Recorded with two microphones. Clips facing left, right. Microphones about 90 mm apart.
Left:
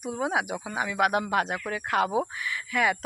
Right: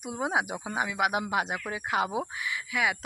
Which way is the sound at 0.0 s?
20° right (ahead or behind).